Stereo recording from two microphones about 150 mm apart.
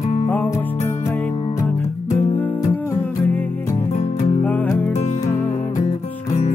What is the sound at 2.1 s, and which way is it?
Music, 10° left (ahead or behind).